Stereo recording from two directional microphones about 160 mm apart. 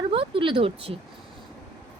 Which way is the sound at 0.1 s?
35° right (ahead or behind).